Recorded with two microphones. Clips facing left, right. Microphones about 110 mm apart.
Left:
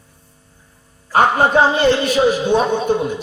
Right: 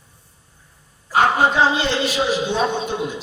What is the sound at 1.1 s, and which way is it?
A man's voice, 50° left (ahead or behind).